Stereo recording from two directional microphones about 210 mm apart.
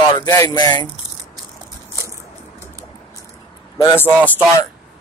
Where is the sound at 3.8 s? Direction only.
10° left (ahead or behind).